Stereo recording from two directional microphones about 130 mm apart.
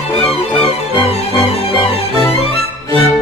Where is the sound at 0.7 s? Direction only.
50° left (ahead or behind).